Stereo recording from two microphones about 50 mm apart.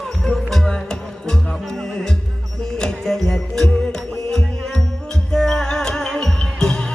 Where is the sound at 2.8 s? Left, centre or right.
Centre.